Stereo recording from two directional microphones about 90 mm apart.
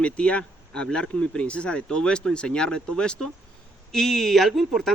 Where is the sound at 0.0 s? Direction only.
10° left (ahead or behind).